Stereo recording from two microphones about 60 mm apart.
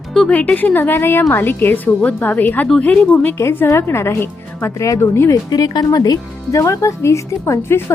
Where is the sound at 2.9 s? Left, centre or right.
Centre.